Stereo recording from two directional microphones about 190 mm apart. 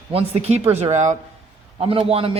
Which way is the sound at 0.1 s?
30° right (ahead or behind).